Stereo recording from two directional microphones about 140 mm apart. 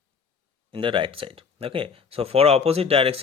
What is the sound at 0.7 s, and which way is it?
Speech, 35° right (ahead or behind).